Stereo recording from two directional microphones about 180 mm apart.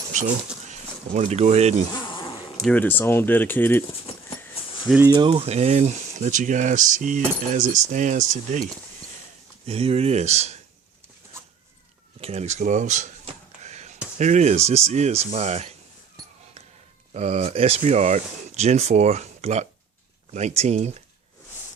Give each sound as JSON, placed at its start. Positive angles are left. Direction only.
{"t": 0.1, "sound": "speech", "side_deg": -40}
{"t": 2.6, "sound": "speech", "side_deg": 5}
{"t": 4.9, "sound": "speech", "side_deg": -20}
{"t": 5.3, "sound": "speech", "side_deg": -35}
{"t": 12.2, "sound": "a sound", "side_deg": -35}
{"t": 14.2, "sound": "speech", "side_deg": -40}
{"t": 17.2, "sound": "speech", "side_deg": -35}